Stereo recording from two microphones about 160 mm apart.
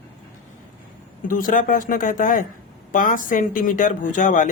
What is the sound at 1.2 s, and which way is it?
Speech, 60° left (ahead or behind).